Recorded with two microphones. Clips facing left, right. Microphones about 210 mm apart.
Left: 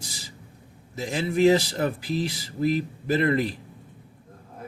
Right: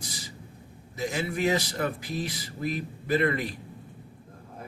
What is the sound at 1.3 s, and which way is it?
Speech, 30° left (ahead or behind).